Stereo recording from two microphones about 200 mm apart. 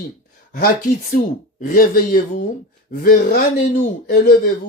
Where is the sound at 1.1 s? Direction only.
45° left (ahead or behind).